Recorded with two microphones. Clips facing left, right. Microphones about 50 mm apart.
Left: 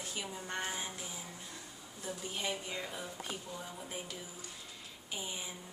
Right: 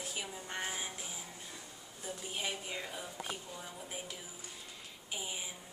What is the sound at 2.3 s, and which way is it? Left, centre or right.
A woman's voice, centre.